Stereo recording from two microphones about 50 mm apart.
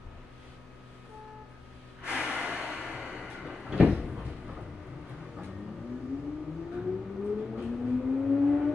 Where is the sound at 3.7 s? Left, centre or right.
Centre.